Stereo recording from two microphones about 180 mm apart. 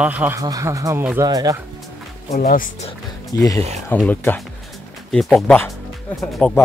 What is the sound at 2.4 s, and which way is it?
Speech, 50° left (ahead or behind).